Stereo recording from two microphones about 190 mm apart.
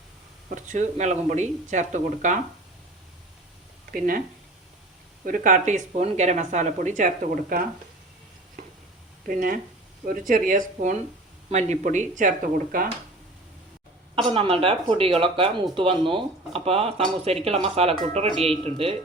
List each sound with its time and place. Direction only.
0.5 s speech: 40° right (ahead or behind)
3.9 s speech: 50° right (ahead or behind)
5.2 s speech: 45° right (ahead or behind)
9.2 s speech: 45° right (ahead or behind)
14.2 s speech: 25° right (ahead or behind)